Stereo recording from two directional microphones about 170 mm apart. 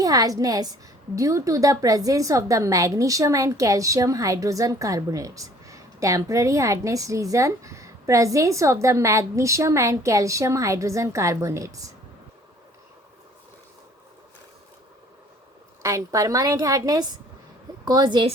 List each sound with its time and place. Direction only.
0.0 s a woman's voice: 20° right (ahead or behind)
15.8 s a woman's voice: 20° right (ahead or behind)